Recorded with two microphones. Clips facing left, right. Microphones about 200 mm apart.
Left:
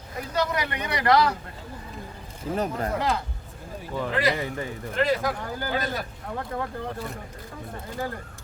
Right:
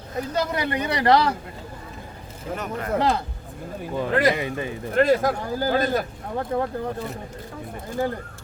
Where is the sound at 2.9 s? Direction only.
30° right (ahead or behind).